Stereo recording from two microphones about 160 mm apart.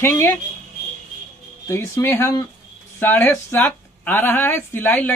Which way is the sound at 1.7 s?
15° left (ahead or behind).